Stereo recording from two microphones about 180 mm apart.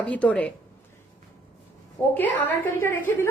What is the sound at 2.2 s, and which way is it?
A woman's voice, 10° left (ahead or behind).